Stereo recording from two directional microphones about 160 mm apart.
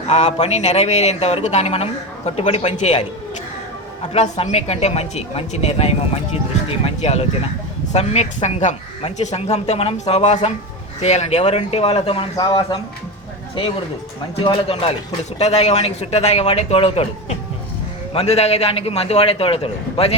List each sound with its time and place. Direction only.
0.1 s speech: 45° left (ahead or behind)
4.1 s a woman's voice: 40° left (ahead or behind)
14.3 s a woman's voice: 35° left (ahead or behind)